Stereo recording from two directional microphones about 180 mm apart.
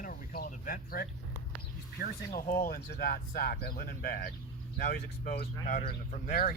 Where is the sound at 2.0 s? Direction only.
55° left (ahead or behind).